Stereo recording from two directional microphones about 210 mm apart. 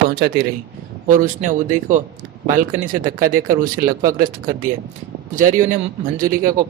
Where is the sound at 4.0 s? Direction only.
15° right (ahead or behind).